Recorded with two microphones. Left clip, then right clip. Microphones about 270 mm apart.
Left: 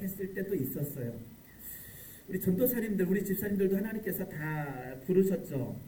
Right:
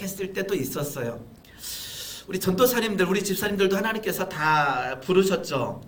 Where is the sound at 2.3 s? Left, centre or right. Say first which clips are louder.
Right 9 dB; right.